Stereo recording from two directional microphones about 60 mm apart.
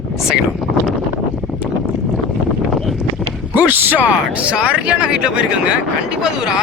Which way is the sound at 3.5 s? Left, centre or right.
Right.